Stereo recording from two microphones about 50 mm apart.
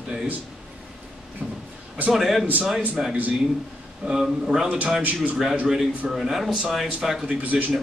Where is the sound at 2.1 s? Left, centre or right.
Centre.